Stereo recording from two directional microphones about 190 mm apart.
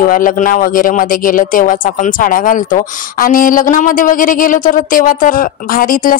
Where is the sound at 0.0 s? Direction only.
45° left (ahead or behind).